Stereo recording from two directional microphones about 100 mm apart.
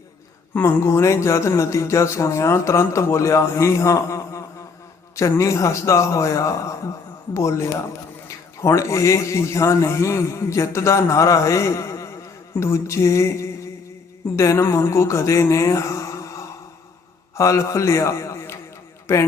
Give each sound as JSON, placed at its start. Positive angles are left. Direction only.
{"t": 0.5, "sound": "a man's voice", "side_deg": 25}
{"t": 14.3, "sound": "a man's voice", "side_deg": 30}